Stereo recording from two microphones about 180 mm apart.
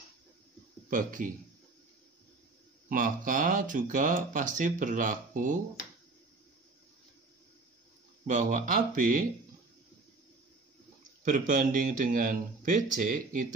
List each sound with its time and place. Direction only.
0.8 s speech: 50° right (ahead or behind)
2.9 s speech: 50° right (ahead or behind)
8.3 s speech: 45° right (ahead or behind)
11.2 s speech: 50° right (ahead or behind)